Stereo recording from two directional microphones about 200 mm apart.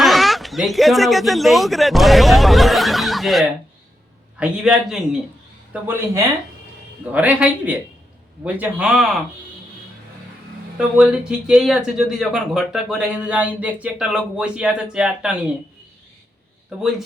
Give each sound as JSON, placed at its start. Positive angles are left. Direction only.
{"t": 0.0, "sound": "a man's voice", "side_deg": 0}
{"t": 10.8, "sound": "speech", "side_deg": -5}